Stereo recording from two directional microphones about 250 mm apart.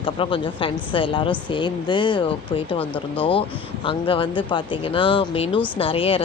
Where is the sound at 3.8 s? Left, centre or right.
Centre.